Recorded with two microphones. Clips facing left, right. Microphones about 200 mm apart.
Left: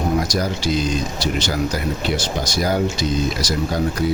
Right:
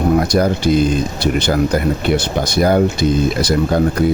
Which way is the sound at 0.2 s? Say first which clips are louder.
Right 7 dB; 60° right (ahead or behind).